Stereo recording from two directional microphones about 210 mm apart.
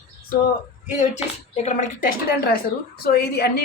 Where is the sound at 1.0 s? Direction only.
30° left (ahead or behind).